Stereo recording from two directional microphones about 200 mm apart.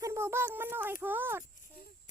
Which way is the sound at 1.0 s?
10° right (ahead or behind).